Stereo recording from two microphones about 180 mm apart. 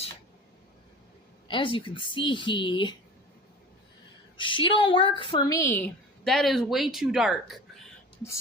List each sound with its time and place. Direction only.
1.5 s a woman's voice: 30° left (ahead or behind)
4.4 s a woman's voice: 25° left (ahead or behind); by 7.5 s centre (ahead or behind)